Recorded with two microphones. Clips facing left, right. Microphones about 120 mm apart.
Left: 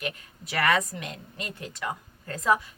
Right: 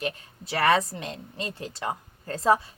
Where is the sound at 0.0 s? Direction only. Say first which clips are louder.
Right 3 dB; 30° right (ahead or behind).